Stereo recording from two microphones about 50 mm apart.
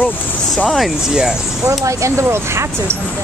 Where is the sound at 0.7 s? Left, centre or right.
Centre.